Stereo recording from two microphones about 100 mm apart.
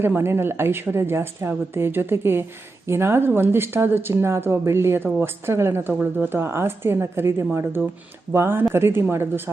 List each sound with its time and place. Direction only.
0.0 s a woman's voice: 25° right (ahead or behind)